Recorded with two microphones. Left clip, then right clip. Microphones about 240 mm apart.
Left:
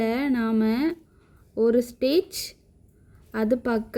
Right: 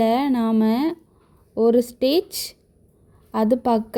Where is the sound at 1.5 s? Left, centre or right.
Centre.